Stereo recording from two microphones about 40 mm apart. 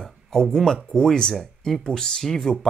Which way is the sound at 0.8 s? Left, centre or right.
Centre.